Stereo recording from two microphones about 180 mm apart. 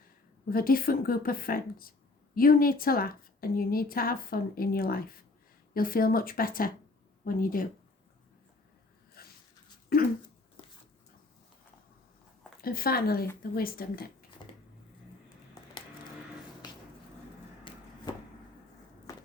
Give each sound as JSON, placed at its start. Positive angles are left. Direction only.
{"t": 0.4, "sound": "a woman's voice", "side_deg": 55}
{"t": 9.2, "sound": "zipper", "side_deg": 60}
{"t": 9.9, "sound": "a woman's voice", "side_deg": 55}
{"t": 12.6, "sound": "a woman's voice", "side_deg": 55}
{"t": 17.6, "sound": "a sound", "side_deg": 30}